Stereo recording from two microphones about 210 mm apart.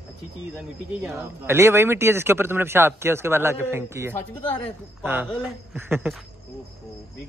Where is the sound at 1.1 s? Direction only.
10° right (ahead or behind).